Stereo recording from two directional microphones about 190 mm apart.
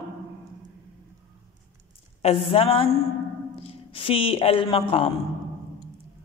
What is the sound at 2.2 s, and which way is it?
A woman's voice, 30° left (ahead or behind).